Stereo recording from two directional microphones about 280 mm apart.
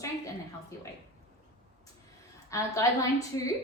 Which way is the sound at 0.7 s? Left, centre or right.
Centre.